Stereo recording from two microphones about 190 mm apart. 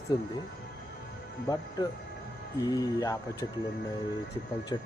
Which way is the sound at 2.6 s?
20° left (ahead or behind).